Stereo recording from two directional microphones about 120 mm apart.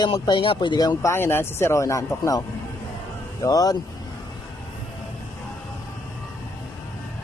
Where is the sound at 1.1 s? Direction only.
20° left (ahead or behind).